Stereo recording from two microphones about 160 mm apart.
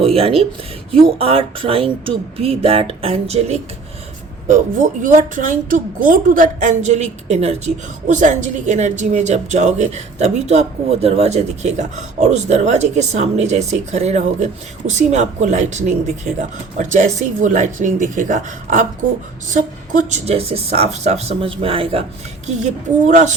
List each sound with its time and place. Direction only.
0.0 s speech: 35° right (ahead or behind)
4.4 s a woman's voice: 50° right (ahead or behind); by 22.0 s 35° right (ahead or behind)
22.4 s a woman's voice: 50° right (ahead or behind)